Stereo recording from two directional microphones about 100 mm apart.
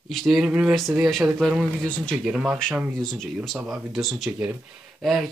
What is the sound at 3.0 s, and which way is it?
Speech, 5° left (ahead or behind).